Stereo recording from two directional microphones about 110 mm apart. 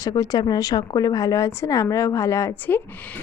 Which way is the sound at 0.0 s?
30° left (ahead or behind).